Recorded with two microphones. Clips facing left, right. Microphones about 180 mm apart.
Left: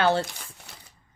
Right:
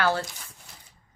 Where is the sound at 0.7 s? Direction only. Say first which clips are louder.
Left 3 dB; 70° left (ahead or behind).